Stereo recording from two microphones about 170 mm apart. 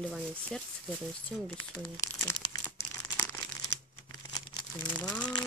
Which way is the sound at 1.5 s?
15° left (ahead or behind).